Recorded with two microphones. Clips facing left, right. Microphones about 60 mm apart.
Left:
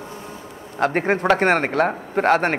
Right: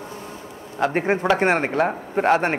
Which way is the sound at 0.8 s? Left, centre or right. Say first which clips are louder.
Left 1 dB; left.